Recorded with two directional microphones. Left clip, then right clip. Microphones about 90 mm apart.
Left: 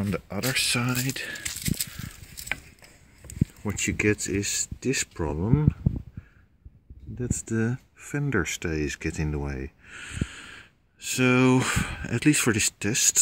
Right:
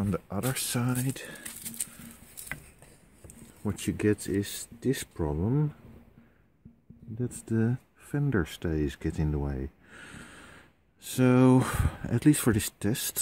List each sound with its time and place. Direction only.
0.0 s a sound: 25° right (ahead or behind)
0.5 s speech: 20° right (ahead or behind)
0.7 s speech: 5° right (ahead or behind)
1.0 s speech: 15° right (ahead or behind)
3.6 s speech: 15° right (ahead or behind)
7.2 s speech: 15° right (ahead or behind)
10.0 s speech: 40° right (ahead or behind)